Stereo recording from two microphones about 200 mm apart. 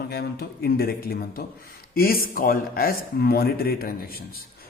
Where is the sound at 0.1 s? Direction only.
50° left (ahead or behind).